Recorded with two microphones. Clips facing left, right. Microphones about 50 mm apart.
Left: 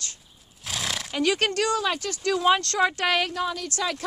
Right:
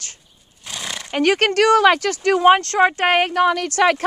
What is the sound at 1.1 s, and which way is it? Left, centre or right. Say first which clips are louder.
Speech: right 8 dB; right.